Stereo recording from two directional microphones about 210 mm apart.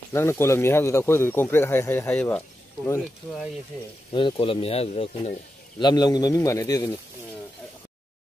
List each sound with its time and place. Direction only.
0.1 s speech: 10° left (ahead or behind)
4.1 s speech: 25° left (ahead or behind)